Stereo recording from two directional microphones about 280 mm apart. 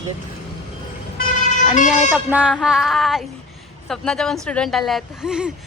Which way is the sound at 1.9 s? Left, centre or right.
Centre.